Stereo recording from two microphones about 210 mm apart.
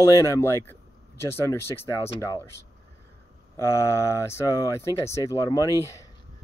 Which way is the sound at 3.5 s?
15° left (ahead or behind).